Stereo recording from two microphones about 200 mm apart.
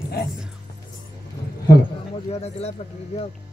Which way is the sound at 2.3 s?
30° left (ahead or behind).